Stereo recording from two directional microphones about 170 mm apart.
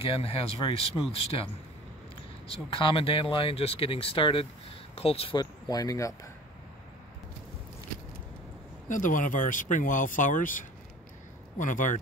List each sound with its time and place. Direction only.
0.0 s speech: 35° left (ahead or behind)
2.4 s speech: 35° left (ahead or behind)
8.8 s speech: 50° left (ahead or behind)